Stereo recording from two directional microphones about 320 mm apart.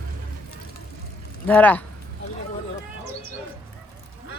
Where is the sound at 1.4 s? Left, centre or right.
Centre.